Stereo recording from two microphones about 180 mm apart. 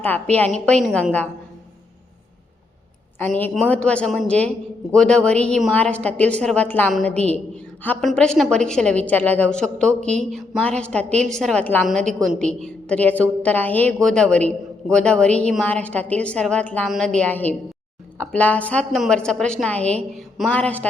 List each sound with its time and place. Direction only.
0.0 s a woman's voice: 10° left (ahead or behind)
3.2 s a woman's voice: 10° left (ahead or behind)